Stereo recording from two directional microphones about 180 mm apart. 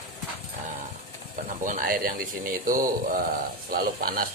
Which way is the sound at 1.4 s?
50° right (ahead or behind).